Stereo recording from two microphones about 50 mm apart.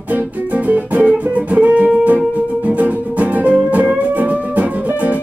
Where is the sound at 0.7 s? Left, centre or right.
Right.